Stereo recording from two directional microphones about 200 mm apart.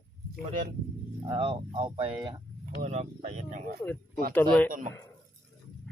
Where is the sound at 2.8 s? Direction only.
35° right (ahead or behind).